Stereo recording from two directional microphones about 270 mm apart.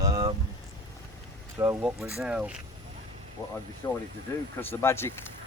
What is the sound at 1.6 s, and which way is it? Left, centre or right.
Speech, centre.